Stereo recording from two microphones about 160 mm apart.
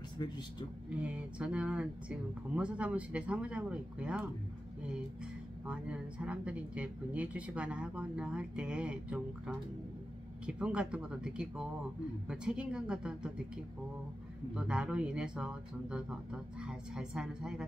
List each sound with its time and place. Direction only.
0.2 s a man's voice: 25° left (ahead or behind)
0.8 s speech: 5° right (ahead or behind)
5.7 s speech: 5° right (ahead or behind)
14.5 s speech: 5° right (ahead or behind)